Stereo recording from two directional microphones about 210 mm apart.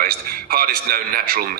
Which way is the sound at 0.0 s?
45° right (ahead or behind).